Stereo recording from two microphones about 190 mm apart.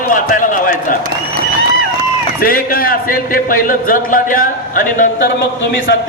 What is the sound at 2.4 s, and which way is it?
A man's voice, 50° left (ahead or behind).